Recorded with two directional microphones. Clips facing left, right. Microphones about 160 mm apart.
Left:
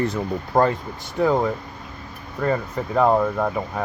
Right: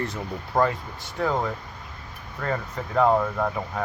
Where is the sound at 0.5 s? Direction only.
35° left (ahead or behind).